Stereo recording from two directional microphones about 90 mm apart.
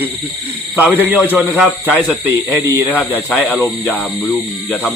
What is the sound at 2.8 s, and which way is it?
Speech, 20° left (ahead or behind).